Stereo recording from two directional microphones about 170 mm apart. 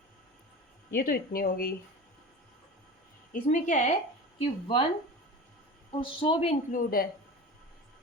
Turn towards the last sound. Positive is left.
turn(degrees=60)  # may be behind; listen again after turning